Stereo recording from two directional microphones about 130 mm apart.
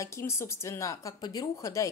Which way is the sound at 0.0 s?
20° left (ahead or behind).